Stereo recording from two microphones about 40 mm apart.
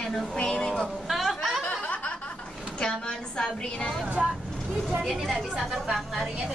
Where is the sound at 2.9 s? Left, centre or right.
Centre.